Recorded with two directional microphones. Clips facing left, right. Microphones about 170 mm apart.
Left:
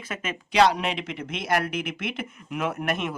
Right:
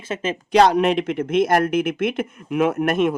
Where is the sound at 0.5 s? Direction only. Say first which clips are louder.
Right 6 dB; 50° right (ahead or behind).